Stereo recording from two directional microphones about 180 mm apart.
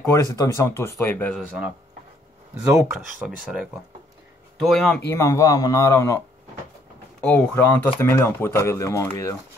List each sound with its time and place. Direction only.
0.0 s speech: 15° left (ahead or behind)
2.6 s speech: 5° right (ahead or behind)
4.6 s speech: 5° left (ahead or behind)
5.1 s speech: 15° left (ahead or behind)
7.2 s speech: 5° left (ahead or behind)